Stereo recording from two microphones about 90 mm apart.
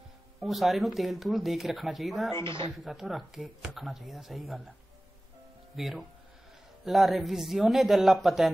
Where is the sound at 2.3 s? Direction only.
30° left (ahead or behind).